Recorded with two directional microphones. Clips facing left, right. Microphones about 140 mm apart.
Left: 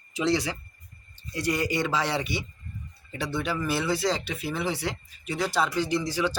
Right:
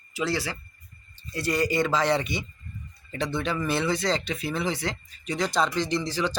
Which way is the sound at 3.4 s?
5° left (ahead or behind).